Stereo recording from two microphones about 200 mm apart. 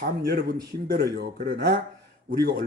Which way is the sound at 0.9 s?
50° right (ahead or behind).